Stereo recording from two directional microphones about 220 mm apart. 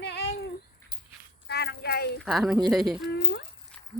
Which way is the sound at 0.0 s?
50° left (ahead or behind).